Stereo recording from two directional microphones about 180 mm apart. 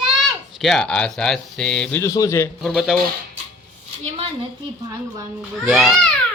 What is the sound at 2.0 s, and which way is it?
Speech, 20° left (ahead or behind).